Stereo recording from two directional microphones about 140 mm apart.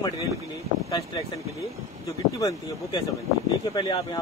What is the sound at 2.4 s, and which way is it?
Speech, 25° left (ahead or behind).